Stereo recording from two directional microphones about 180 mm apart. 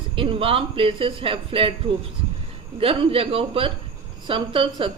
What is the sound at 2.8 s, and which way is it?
Speech, 30° right (ahead or behind).